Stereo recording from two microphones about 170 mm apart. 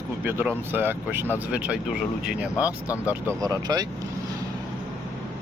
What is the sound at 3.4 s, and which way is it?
Speech, 20° right (ahead or behind).